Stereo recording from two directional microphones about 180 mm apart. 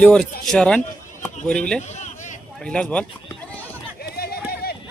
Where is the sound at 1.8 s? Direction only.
40° left (ahead or behind).